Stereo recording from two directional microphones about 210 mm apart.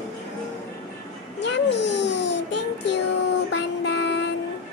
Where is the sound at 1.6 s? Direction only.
55° left (ahead or behind).